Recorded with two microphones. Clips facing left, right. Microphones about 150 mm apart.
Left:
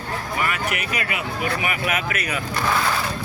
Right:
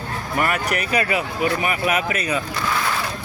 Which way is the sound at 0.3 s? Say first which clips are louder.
Right 5 dB; 45° right (ahead or behind).